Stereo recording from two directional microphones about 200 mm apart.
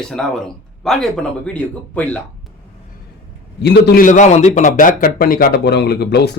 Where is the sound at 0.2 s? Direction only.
5° left (ahead or behind).